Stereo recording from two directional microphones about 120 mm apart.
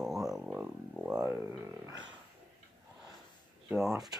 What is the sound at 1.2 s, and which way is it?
Speech, 20° right (ahead or behind).